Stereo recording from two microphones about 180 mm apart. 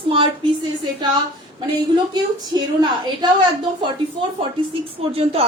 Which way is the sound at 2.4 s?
25° right (ahead or behind).